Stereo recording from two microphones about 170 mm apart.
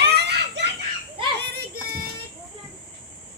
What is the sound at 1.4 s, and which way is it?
Child singing, 70° right (ahead or behind).